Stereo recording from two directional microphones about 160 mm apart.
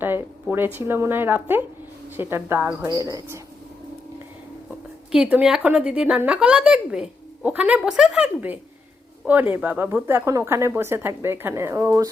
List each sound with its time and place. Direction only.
0.0 s a woman's voice: 15° right (ahead or behind)
5.1 s a woman's voice: 5° right (ahead or behind)